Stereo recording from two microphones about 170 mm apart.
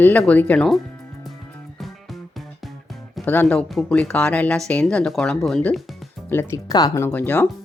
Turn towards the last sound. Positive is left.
turn(degrees=10)  # may be behind; listen again after turning